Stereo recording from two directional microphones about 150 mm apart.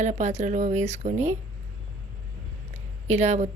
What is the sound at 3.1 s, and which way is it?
Speech, 50° right (ahead or behind).